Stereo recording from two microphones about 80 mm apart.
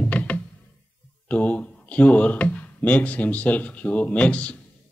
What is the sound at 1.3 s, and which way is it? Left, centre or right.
A man's voice, centre.